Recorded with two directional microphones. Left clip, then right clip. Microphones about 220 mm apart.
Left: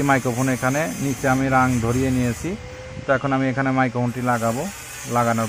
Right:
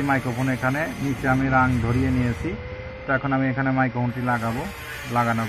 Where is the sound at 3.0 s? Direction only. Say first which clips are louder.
Left 3 dB; 30° left (ahead or behind).